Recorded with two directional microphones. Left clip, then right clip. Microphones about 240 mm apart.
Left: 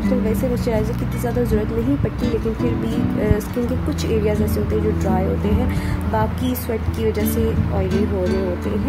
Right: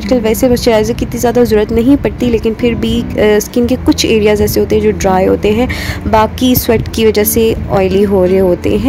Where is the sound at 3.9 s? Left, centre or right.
Right.